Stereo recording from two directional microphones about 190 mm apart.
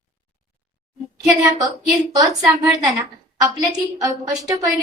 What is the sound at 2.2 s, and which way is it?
A woman's voice, 20° right (ahead or behind).